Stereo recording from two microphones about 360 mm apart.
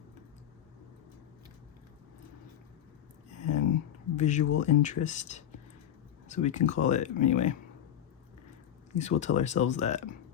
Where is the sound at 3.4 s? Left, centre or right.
Left.